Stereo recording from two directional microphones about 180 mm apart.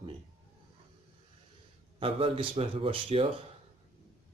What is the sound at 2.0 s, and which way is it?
Speech, 30° right (ahead or behind).